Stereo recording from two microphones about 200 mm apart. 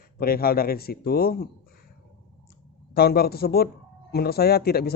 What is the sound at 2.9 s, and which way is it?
Speech, 50° left (ahead or behind).